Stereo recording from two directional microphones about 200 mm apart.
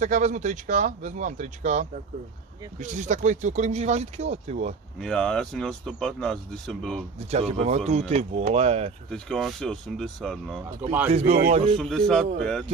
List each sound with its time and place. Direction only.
0.0 s speech: 40° right (ahead or behind)
4.9 s speech: 5° left (ahead or behind)
7.2 s speech: 30° right (ahead or behind)
9.1 s speech: 5° left (ahead or behind)
10.8 s a man's voice: 10° right (ahead or behind)
11.1 s speech: 30° right (ahead or behind)
11.8 s speech: 5° left (ahead or behind)